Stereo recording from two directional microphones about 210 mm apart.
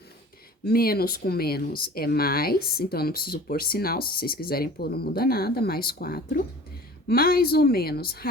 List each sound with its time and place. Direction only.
0.6 s speech: 45° left (ahead or behind)